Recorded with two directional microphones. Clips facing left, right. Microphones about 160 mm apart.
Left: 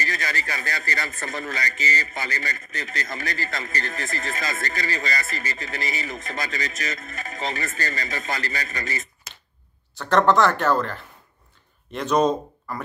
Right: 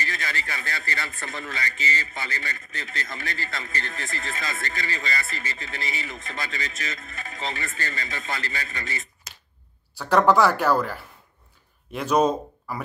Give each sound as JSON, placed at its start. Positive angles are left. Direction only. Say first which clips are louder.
{"t": 0.0, "sound": "a man's voice", "louder": "left 3 dB", "side_deg": 40}
{"t": 9.9, "sound": "speech", "louder": "even", "side_deg": -10}